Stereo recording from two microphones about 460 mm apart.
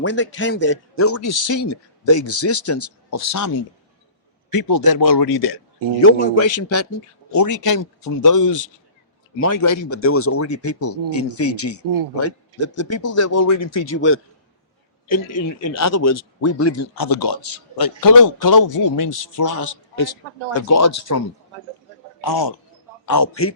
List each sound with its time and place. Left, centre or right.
0.0 s a man's voice: left
4.5 s speech: left
6.3 s a man's voice: left
13.8 s a man's voice: left
15.0 s a man's voice: left
16.9 s a man's voice: left
22.2 s speech: left
23.0 s speech: left